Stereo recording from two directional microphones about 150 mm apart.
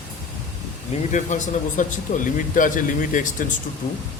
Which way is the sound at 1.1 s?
55° left (ahead or behind).